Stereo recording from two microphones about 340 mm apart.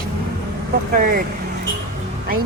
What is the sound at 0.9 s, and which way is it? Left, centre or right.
Speech, right.